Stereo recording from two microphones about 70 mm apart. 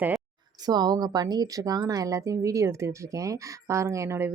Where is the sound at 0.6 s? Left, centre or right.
Right.